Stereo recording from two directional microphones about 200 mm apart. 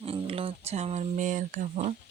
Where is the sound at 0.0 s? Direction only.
30° right (ahead or behind).